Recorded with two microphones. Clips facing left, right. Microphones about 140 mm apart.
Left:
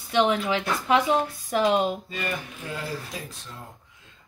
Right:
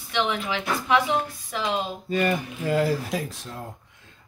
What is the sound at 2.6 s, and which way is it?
Speech, 85° right.